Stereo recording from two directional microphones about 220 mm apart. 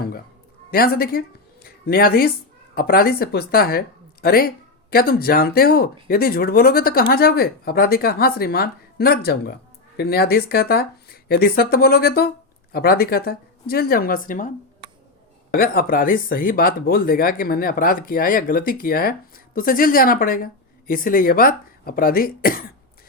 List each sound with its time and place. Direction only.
0.7 s a woman's voice: 45° left (ahead or behind)
15.5 s speech: 40° left (ahead or behind)